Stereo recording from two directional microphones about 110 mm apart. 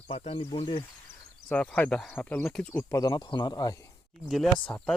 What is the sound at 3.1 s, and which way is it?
Speech, 45° left (ahead or behind).